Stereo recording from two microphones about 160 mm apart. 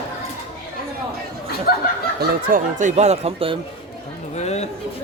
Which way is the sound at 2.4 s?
55° right (ahead or behind).